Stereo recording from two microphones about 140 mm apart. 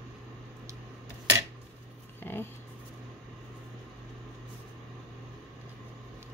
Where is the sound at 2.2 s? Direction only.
15° left (ahead or behind).